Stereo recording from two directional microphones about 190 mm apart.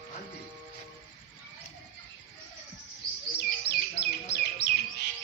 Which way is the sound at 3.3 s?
60° left (ahead or behind).